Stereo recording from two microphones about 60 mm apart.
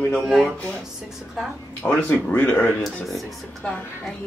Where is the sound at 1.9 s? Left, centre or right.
Left.